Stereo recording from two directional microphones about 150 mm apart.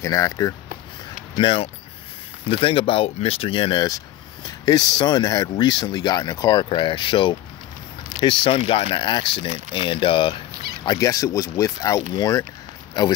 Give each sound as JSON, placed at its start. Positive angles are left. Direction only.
{"t": 0.0, "sound": "speech", "side_deg": 20}
{"t": 1.3, "sound": "speech", "side_deg": 35}
{"t": 10.5, "sound": "cat", "side_deg": -90}
{"t": 10.9, "sound": "speech", "side_deg": 25}